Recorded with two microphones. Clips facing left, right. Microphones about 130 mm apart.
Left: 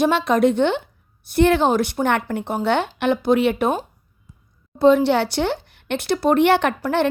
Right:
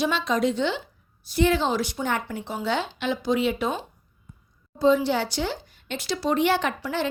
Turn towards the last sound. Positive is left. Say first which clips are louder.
# left 7 dB
turn(degrees=60)  # may be behind; listen again after turning